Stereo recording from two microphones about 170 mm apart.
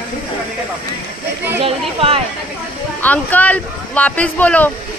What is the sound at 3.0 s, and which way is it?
Speech, 10° left (ahead or behind).